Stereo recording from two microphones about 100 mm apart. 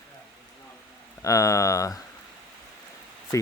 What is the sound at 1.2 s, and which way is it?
Speech, 35° left (ahead or behind).